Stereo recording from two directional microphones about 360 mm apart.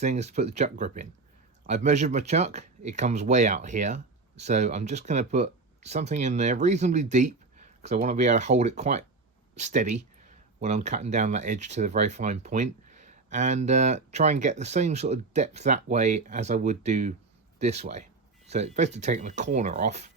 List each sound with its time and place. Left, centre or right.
0.0 s speech: centre